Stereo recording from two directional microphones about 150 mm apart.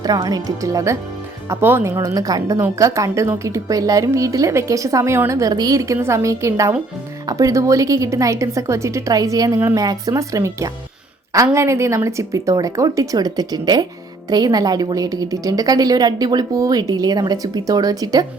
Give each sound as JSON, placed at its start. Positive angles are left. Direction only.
{"t": 0.0, "sound": "a woman's voice", "side_deg": -25}